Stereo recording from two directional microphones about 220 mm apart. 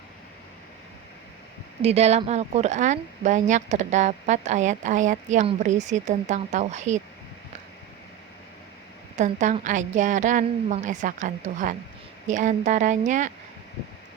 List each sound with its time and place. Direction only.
1.8 s speech: 30° right (ahead or behind)
9.1 s speech: 35° right (ahead or behind)